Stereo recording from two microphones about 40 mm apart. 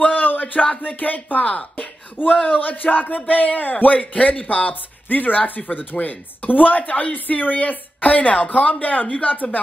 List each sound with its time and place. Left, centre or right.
0.0 s a sound: left
0.8 s speech: left
1.5 s speech: left
2.4 s speech: left
5.0 s speech: left